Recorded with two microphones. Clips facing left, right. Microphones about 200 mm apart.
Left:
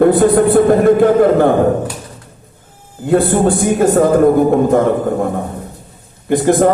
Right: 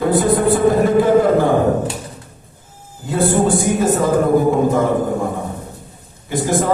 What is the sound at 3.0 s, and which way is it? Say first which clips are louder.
A man's voice: left 4 dB; 60° left (ahead or behind).